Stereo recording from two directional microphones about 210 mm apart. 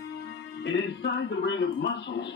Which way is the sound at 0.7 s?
60° left (ahead or behind).